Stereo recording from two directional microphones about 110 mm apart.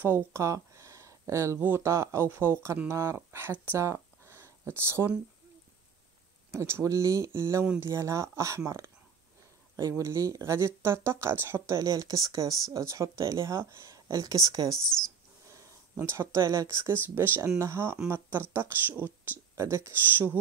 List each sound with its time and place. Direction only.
0.0 s speech: 20° right (ahead or behind)
6.5 s speech: 25° right (ahead or behind)
14.7 s speech: 5° left (ahead or behind)
15.5 s speech: 25° right (ahead or behind)